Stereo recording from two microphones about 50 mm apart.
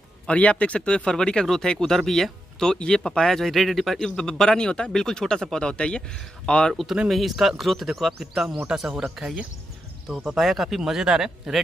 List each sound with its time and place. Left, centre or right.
0.3 s speech: left
6.7 s a man's voice: centre
10.8 s speech: centre